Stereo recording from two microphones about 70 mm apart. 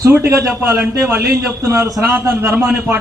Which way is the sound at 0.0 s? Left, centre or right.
Right.